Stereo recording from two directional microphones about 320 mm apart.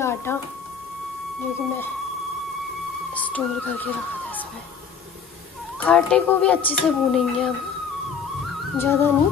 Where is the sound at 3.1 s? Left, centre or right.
Centre.